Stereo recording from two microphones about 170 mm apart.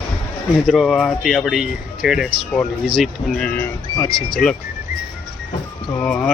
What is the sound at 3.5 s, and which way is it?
Speech, 10° left (ahead or behind).